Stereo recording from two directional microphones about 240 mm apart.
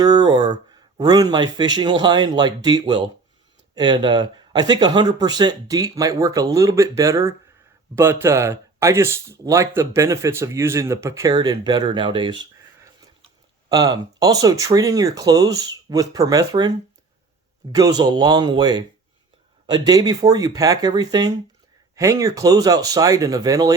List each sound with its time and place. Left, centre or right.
0.0 s speech: centre
17.7 s speech: centre